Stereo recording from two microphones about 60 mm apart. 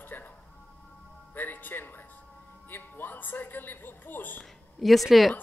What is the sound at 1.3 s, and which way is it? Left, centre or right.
Music, left.